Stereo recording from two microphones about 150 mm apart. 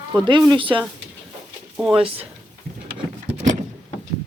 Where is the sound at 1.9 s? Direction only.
40° right (ahead or behind).